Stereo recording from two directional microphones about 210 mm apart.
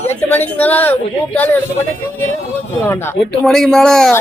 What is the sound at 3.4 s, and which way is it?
Speech, centre (ahead or behind).